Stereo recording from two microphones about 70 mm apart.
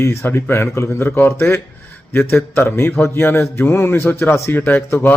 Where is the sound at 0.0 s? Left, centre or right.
Left.